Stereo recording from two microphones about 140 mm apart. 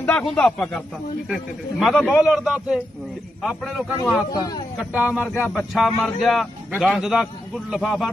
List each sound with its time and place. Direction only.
0.0 s a man's voice: 5° left (ahead or behind)
4.3 s speech: 30° left (ahead or behind)
5.0 s speech: 15° left (ahead or behind)
5.7 s a man's voice: centre (ahead or behind)